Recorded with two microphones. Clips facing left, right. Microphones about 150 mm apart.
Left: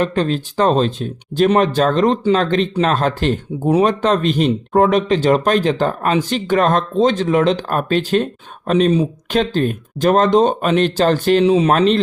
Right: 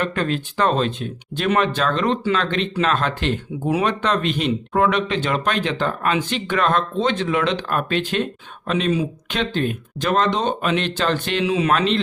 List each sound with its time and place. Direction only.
0.0 s speech: 35° left (ahead or behind)